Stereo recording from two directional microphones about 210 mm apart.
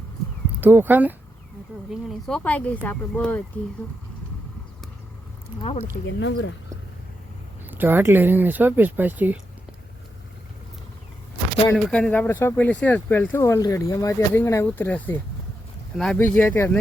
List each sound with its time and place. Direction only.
0.6 s a woman's voice: 10° right (ahead or behind); by 3.4 s 5° left (ahead or behind)
6.1 s speech: 60° left (ahead or behind)
7.7 s speech: 10° right (ahead or behind)
11.7 s speech: 5° left (ahead or behind)